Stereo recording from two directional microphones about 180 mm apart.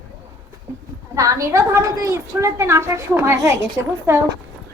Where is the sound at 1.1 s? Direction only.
20° right (ahead or behind).